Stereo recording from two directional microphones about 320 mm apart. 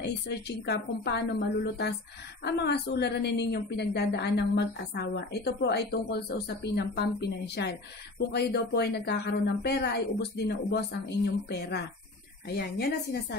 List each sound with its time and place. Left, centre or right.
0.0 s a woman's voice: left